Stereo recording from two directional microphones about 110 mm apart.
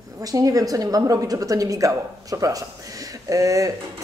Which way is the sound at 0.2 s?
35° right (ahead or behind).